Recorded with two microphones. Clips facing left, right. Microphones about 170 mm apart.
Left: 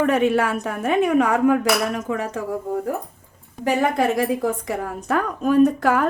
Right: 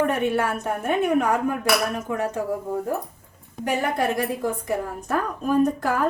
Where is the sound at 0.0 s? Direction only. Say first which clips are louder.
Left 4 dB; 90° left.